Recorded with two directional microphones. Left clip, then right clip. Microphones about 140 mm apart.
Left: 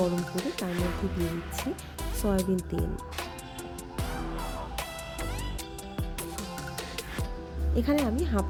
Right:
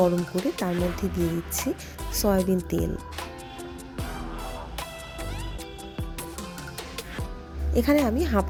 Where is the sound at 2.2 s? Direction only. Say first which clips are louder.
Right 6 dB; 15° right (ahead or behind).